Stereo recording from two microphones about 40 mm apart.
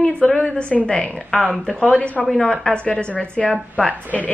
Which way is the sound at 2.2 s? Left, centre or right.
Centre.